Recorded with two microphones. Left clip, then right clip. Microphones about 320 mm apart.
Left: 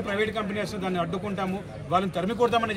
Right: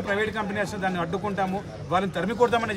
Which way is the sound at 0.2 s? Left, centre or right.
Centre.